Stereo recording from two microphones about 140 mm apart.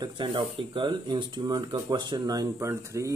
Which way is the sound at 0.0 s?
35° right (ahead or behind).